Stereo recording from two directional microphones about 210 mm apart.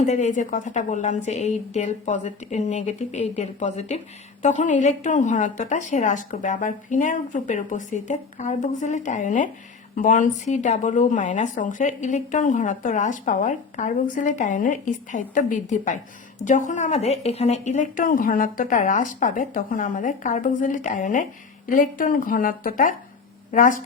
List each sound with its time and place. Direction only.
0.0 s speech: 35° left (ahead or behind)